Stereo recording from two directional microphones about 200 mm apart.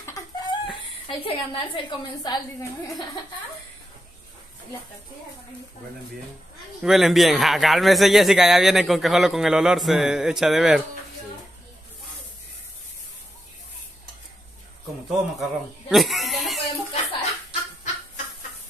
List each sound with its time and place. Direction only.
0.0 s chicken: 20° left (ahead or behind)
1.0 s a woman's voice: 25° left (ahead or behind)
6.8 s a man's voice: centre (ahead or behind)
15.0 s a sound: centre (ahead or behind)